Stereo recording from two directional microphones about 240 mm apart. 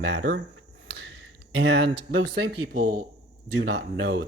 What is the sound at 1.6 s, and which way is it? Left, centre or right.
Speech, right.